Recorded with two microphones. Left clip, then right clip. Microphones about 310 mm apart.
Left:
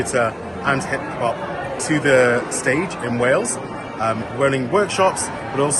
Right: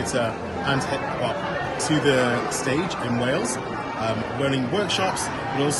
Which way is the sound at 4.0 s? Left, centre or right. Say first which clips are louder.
Left 7 dB; centre.